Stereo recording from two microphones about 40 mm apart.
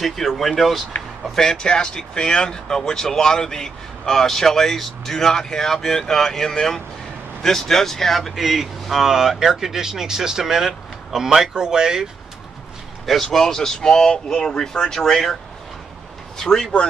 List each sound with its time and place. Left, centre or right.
0.0 s speech: centre
1.3 s speech: centre
8.4 s speech: centre
13.0 s speech: centre
16.3 s speech: centre